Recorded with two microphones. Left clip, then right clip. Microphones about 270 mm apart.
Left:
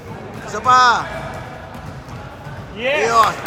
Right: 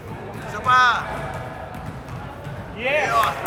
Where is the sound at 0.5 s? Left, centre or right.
Centre.